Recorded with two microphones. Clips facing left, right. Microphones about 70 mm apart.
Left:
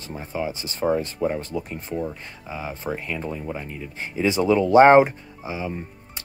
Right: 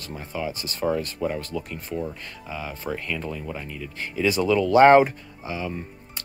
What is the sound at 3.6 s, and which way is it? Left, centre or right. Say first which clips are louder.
Speech: even; left.